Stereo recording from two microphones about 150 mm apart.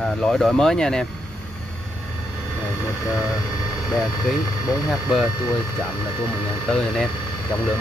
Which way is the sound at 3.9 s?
Centre (ahead or behind).